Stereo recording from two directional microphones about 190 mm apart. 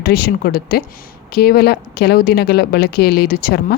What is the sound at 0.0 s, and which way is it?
A woman's voice, 55° left (ahead or behind).